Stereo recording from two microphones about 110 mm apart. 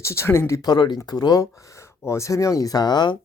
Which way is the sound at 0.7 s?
40° left (ahead or behind).